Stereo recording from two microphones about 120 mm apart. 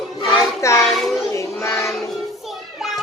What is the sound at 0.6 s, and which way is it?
Child singing, 25° left (ahead or behind).